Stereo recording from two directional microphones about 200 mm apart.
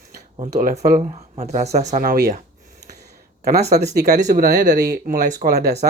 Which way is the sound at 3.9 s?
55° right (ahead or behind).